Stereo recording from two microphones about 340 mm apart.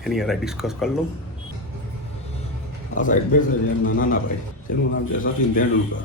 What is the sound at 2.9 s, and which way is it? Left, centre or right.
Speech, left.